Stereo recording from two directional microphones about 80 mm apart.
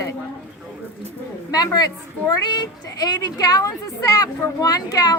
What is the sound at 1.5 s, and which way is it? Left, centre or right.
A woman's voice, left.